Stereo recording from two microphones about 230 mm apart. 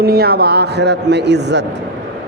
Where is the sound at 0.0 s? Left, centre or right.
Right.